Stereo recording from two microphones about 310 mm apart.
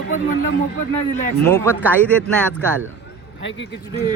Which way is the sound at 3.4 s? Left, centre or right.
Left.